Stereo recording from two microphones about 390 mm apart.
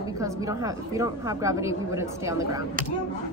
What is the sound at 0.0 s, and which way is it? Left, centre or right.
Speech, centre.